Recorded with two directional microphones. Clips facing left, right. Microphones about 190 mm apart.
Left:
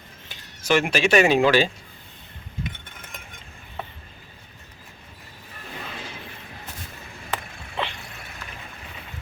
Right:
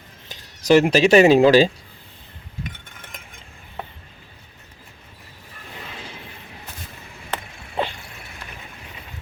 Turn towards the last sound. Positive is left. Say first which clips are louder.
# right 4 dB
turn(degrees=-40)  # may be behind; listen again after turning